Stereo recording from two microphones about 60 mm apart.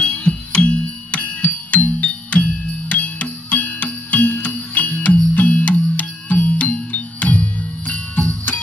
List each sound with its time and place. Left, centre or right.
0.0 s music: centre
7.9 s jingle bell: left